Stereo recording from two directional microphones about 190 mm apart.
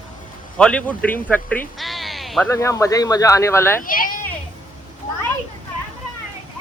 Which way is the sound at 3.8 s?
45° left (ahead or behind).